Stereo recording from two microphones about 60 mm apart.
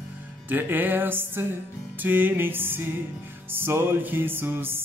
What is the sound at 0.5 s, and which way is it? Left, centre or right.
Music, right.